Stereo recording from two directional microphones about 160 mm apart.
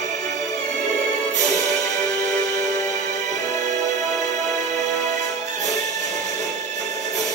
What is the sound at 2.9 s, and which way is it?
Music, 45° right (ahead or behind).